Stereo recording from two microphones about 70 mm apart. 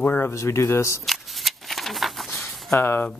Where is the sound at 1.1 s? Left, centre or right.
Centre.